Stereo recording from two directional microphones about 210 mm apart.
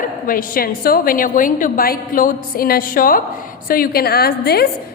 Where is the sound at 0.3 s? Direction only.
40° left (ahead or behind).